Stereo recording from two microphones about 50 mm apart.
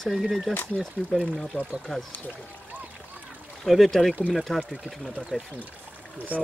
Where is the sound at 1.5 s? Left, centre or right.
Right.